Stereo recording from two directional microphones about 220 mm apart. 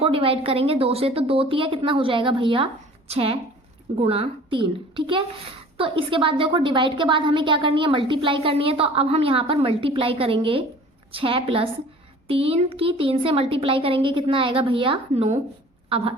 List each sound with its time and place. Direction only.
0.0 s a woman's voice: 25° right (ahead or behind)